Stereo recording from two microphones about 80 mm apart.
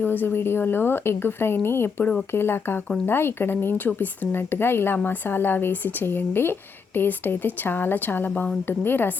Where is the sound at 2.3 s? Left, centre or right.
Left.